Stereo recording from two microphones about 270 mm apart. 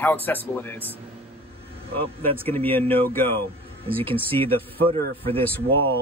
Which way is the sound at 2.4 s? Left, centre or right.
Centre.